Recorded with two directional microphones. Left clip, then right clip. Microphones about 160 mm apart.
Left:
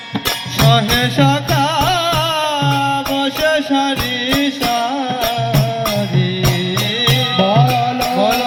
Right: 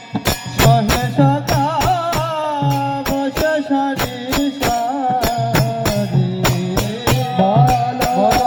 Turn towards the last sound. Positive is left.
turn(degrees=20)  # may be behind; listen again after turning